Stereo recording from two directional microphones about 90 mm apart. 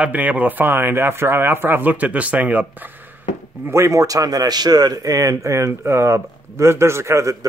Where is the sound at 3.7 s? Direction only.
35° right (ahead or behind).